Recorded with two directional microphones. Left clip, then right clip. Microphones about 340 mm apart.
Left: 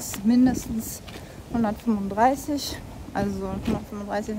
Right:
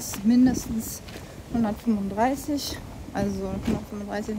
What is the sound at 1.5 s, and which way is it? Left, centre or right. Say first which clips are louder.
Speech: left 1 dB; centre.